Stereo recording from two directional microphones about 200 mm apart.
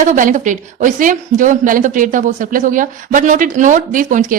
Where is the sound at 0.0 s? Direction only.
40° right (ahead or behind).